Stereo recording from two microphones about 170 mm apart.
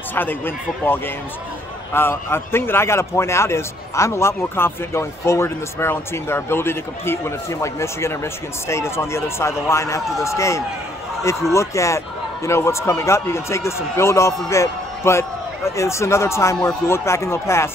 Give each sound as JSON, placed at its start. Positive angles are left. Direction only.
{"t": 0.1, "sound": "a man's voice", "side_deg": 10}